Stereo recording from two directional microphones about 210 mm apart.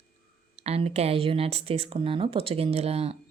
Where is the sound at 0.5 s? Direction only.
30° right (ahead or behind).